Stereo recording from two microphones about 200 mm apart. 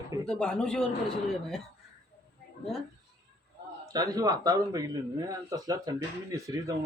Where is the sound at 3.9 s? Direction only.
20° right (ahead or behind).